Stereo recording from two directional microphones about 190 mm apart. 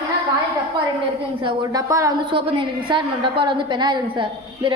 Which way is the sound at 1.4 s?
20° right (ahead or behind).